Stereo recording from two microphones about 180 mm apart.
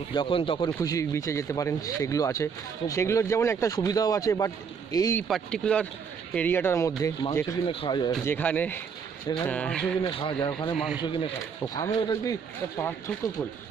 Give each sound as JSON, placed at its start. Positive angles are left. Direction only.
{"t": 0.1, "sound": "speech", "side_deg": 30}
{"t": 0.7, "sound": "speech", "side_deg": 15}
{"t": 5.3, "sound": "speech", "side_deg": 5}
{"t": 7.6, "sound": "speech", "side_deg": 25}
{"t": 8.3, "sound": "speech", "side_deg": 10}
{"t": 10.0, "sound": "speech", "side_deg": 25}